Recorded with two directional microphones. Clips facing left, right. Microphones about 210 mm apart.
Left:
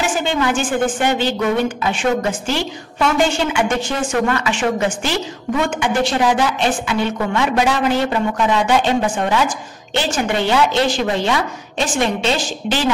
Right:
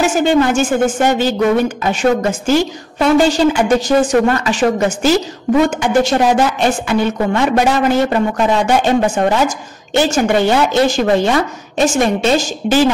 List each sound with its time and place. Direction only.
0.0 s a woman's voice: 40° right (ahead or behind)